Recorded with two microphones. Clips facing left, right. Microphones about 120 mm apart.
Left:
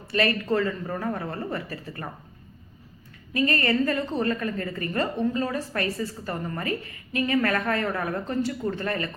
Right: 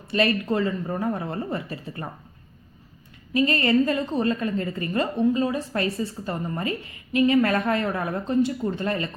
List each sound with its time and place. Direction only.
0.1 s a woman's voice: 20° right (ahead or behind)
3.3 s a woman's voice: 20° right (ahead or behind)